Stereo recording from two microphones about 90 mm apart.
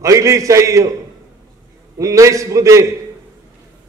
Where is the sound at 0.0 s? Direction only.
35° right (ahead or behind).